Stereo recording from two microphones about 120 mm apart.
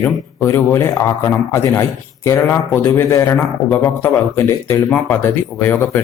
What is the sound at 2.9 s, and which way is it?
A man's voice, 20° left (ahead or behind).